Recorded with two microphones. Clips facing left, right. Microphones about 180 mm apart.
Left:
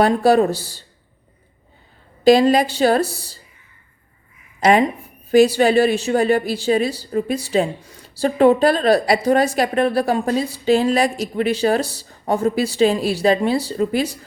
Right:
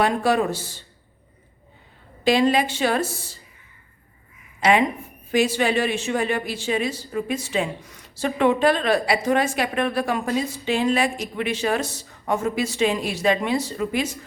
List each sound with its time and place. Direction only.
0.0 s a woman's voice: 40° left (ahead or behind)
2.2 s a woman's voice: 40° left (ahead or behind)
4.6 s a woman's voice: 40° left (ahead or behind)